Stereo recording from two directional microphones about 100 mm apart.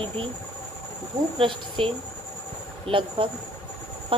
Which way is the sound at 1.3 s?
60° right (ahead or behind).